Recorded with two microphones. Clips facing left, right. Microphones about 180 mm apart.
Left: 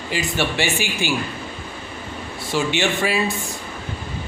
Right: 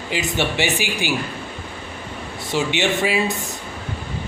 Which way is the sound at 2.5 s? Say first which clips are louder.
Even; 20° right (ahead or behind).